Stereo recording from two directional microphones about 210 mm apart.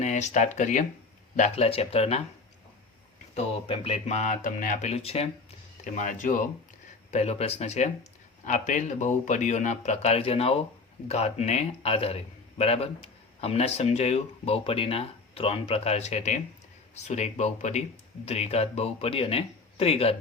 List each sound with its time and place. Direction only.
0.0 s a man's voice: 35° left (ahead or behind)
3.3 s a man's voice: 30° left (ahead or behind)